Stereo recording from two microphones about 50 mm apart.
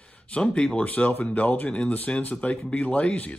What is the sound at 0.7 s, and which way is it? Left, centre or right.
Speech, left.